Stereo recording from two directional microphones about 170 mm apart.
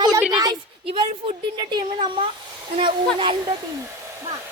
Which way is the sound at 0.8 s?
30° right (ahead or behind).